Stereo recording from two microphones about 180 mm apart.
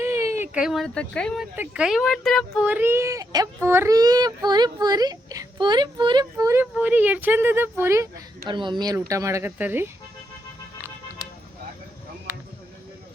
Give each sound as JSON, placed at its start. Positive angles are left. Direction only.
{"t": 0.0, "sound": "speech", "side_deg": -15}
{"t": 8.4, "sound": "speech", "side_deg": -25}